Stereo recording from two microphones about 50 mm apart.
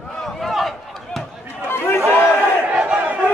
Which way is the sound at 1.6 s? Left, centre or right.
Left.